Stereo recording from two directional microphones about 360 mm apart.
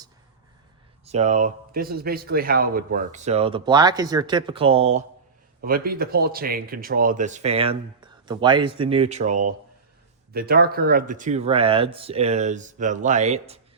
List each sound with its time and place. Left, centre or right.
1.0 s speech: centre